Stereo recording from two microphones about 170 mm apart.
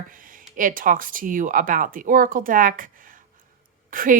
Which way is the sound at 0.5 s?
55° right (ahead or behind).